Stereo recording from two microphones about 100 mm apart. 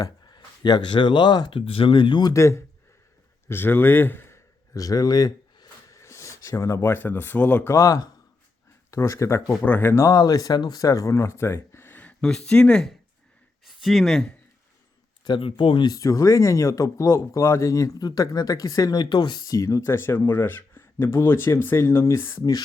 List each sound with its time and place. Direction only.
0.0 s speech: 45° left (ahead or behind)
1.5 s speech: 70° left (ahead or behind); by 2.3 s 50° left (ahead or behind)
2.3 s speech: 30° left (ahead or behind)
4.7 s speech: 35° left (ahead or behind); by 7.7 s 20° left (ahead or behind)
7.7 s speech: 35° left (ahead or behind); by 12.9 s 10° left (ahead or behind)
13.7 s speech: centre (ahead or behind)
15.2 s speech: 55° left (ahead or behind)
15.9 s speech: 35° left (ahead or behind)